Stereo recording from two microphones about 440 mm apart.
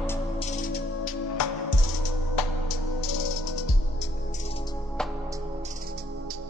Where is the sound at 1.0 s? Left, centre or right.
Left.